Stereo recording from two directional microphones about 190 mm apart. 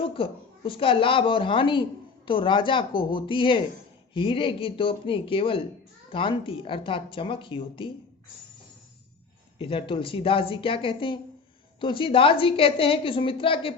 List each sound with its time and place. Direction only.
0.0 s a woman's voice: 30° left (ahead or behind)
9.6 s a woman's voice: 30° left (ahead or behind)